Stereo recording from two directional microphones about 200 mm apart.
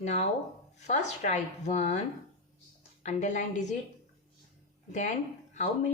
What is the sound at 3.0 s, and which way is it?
Speech, 35° left (ahead or behind).